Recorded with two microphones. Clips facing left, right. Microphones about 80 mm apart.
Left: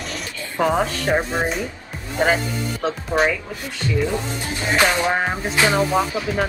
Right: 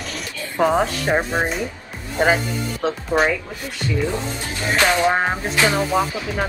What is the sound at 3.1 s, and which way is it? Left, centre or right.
Speech, centre.